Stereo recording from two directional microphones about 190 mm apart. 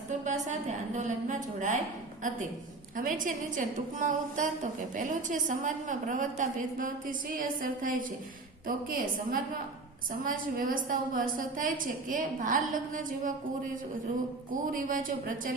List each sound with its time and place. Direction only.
0.9 s a woman's voice: 40° right (ahead or behind)
2.9 s a woman's voice: 45° right (ahead or behind)
14.5 s a woman's voice: 45° right (ahead or behind)